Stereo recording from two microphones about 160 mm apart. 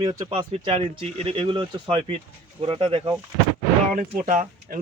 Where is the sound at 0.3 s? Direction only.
35° right (ahead or behind).